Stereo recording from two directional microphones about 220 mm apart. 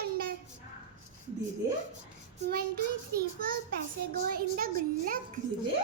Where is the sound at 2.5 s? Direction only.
45° right (ahead or behind).